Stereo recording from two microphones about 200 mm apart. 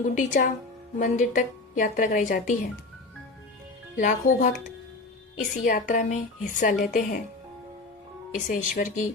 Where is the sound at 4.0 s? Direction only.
40° left (ahead or behind).